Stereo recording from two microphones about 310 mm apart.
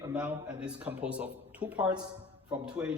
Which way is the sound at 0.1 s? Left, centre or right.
Centre.